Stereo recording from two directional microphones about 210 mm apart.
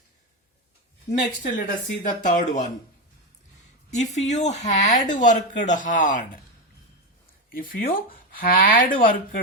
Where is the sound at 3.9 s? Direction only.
35° left (ahead or behind).